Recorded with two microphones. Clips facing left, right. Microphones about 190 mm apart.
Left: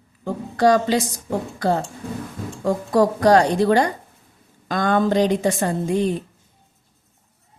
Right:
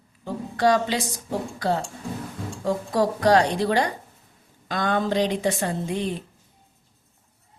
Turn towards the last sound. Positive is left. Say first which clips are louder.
# left 6 dB
turn(degrees=45)  # may be behind; listen again after turning